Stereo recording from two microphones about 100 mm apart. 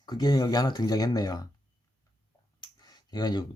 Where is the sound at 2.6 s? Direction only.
45° left (ahead or behind).